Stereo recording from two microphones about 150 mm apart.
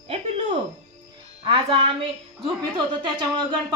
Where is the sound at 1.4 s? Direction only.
40° right (ahead or behind).